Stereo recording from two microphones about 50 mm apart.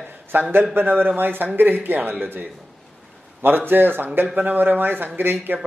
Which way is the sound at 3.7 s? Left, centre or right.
Right.